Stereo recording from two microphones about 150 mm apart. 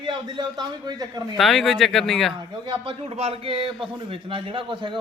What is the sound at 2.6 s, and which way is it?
A man's voice, 35° right (ahead or behind).